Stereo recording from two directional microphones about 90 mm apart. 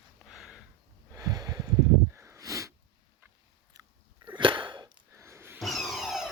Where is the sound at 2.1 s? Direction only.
30° right (ahead or behind).